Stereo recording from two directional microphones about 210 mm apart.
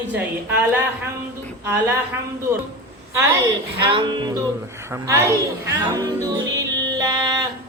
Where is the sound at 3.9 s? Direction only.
20° right (ahead or behind).